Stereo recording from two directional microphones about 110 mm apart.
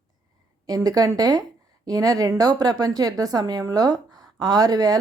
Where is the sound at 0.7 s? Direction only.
35° right (ahead or behind).